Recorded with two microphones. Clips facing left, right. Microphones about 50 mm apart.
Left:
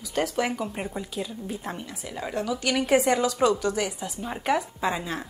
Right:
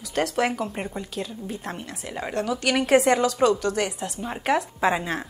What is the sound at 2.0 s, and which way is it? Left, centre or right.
A woman's voice, right.